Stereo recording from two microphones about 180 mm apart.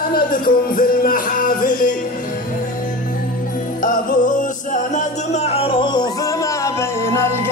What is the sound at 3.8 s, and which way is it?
Music, 50° left (ahead or behind).